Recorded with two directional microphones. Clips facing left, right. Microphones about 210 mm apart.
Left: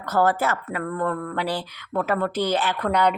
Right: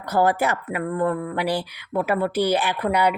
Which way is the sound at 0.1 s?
15° right (ahead or behind).